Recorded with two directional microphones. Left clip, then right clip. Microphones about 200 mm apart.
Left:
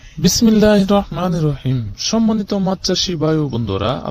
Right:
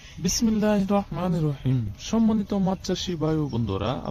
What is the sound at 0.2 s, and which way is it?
A man's voice, 40° left (ahead or behind).